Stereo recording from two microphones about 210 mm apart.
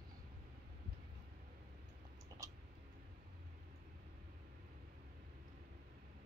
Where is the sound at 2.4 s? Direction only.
15° right (ahead or behind).